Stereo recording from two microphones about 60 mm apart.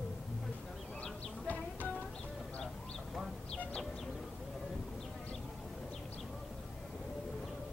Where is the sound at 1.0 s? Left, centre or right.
Left.